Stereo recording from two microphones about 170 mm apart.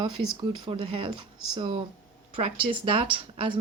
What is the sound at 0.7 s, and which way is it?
Speech, 30° right (ahead or behind).